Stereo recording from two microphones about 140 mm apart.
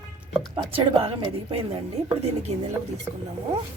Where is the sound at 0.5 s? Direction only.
40° right (ahead or behind).